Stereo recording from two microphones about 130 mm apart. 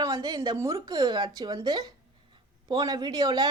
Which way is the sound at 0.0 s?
25° right (ahead or behind).